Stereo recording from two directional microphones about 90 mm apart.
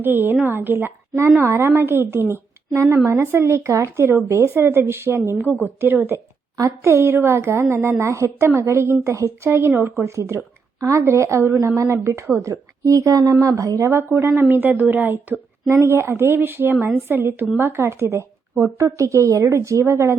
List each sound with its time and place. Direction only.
0.0 s a woman's voice: 25° right (ahead or behind)
6.6 s a woman's voice: 35° right (ahead or behind)